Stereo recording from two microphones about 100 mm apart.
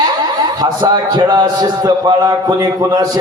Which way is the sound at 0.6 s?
45° right (ahead or behind).